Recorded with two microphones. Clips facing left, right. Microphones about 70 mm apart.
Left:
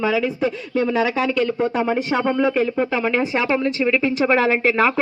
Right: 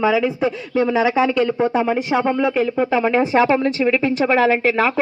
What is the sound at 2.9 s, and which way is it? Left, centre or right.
Speech, centre.